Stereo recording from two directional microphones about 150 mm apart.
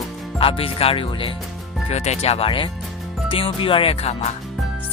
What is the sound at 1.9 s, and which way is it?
Speech, 45° left (ahead or behind).